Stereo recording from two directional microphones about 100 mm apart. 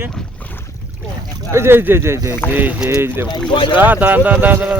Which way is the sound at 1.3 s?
25° right (ahead or behind).